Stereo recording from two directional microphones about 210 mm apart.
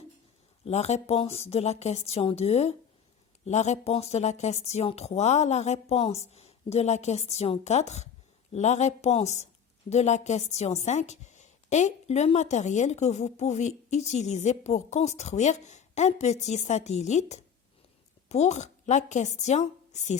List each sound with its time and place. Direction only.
0.6 s a woman's voice: 30° left (ahead or behind)